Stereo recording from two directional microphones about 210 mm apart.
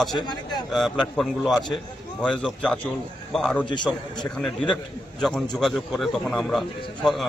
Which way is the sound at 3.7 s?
20° left (ahead or behind).